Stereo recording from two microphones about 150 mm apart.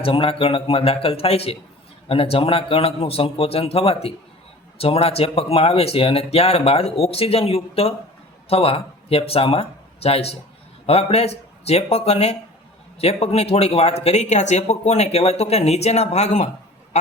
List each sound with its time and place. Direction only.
0.0 s speech: 35° left (ahead or behind)